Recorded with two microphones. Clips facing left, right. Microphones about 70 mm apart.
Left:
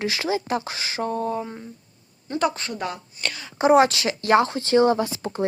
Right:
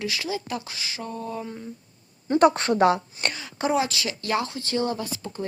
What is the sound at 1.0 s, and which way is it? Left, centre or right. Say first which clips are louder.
Speech: left 8 dB; left.